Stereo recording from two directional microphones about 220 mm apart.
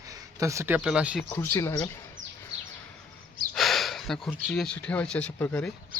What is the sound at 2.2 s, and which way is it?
Bird, 35° right (ahead or behind).